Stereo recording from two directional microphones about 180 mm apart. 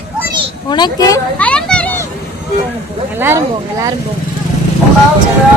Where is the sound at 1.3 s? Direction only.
5° left (ahead or behind).